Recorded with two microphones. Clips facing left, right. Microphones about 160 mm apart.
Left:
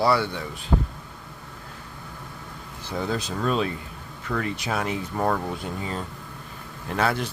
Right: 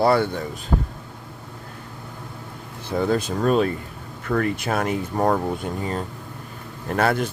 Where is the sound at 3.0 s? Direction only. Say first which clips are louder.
Right 6 dB; 50° right (ahead or behind).